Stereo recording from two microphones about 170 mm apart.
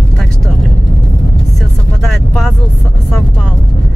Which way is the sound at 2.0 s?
Centre (ahead or behind).